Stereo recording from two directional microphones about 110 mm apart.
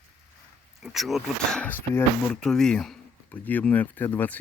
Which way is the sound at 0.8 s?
Centre (ahead or behind).